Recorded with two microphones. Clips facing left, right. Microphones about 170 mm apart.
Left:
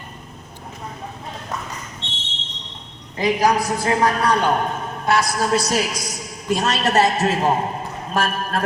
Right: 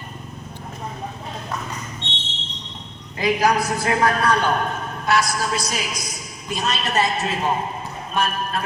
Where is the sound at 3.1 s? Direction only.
20° left (ahead or behind).